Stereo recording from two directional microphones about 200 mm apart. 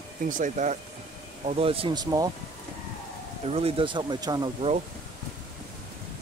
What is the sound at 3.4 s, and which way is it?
Speech, 30° right (ahead or behind).